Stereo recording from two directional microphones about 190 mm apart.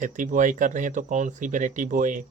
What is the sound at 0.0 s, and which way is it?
Speech, 45° right (ahead or behind).